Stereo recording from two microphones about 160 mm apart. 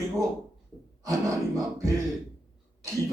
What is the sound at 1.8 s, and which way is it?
Speech, 20° right (ahead or behind).